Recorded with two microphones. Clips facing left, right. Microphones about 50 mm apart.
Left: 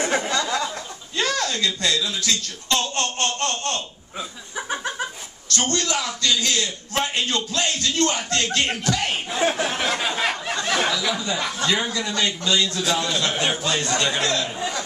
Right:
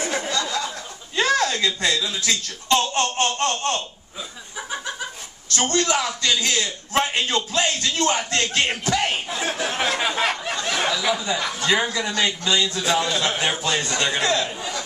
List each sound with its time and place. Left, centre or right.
0.0 s a sound: left
1.1 s a man's voice: right
5.5 s a man's voice: centre
9.3 s speech: left
9.8 s a sound: centre
10.8 s a man's voice: centre